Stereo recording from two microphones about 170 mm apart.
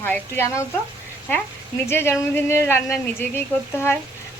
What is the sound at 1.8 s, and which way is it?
A woman's voice, 15° left (ahead or behind).